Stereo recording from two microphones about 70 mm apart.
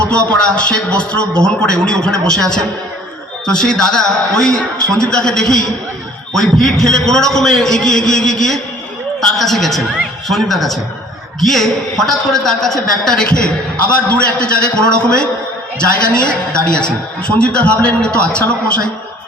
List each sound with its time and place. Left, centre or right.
0.0 s a man's voice: centre